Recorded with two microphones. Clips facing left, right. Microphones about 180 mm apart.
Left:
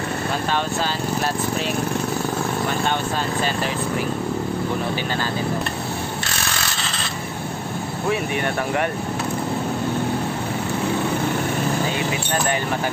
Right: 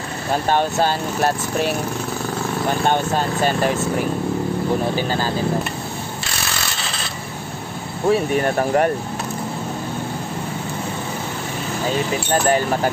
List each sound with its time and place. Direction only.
0.5 s speech: 50° right (ahead or behind)
3.4 s speech: 50° right (ahead or behind)
8.1 s speech: 35° right (ahead or behind)